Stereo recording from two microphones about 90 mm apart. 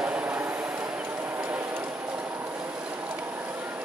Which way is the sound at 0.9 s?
15° right (ahead or behind).